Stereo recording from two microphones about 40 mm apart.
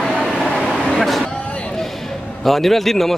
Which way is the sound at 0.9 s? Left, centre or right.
Centre.